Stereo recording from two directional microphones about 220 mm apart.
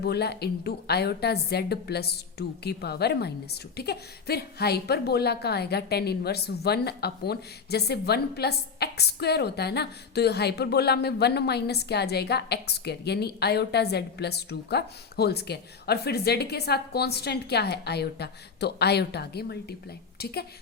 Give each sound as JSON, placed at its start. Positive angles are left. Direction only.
{"t": 0.0, "sound": "a woman's voice", "side_deg": 45}